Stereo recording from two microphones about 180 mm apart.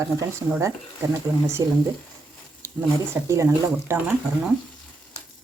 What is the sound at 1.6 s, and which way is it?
Speech, 20° right (ahead or behind).